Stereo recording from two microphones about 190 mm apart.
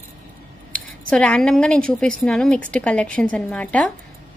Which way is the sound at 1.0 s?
5° left (ahead or behind).